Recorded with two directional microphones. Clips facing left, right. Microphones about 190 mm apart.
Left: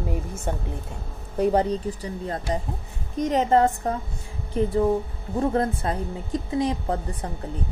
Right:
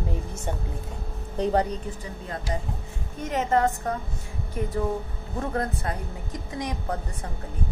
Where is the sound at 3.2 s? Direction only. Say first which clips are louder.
Left 4 dB; 30° left (ahead or behind).